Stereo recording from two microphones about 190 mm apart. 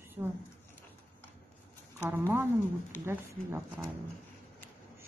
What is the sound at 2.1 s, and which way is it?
Speech, 10° right (ahead or behind).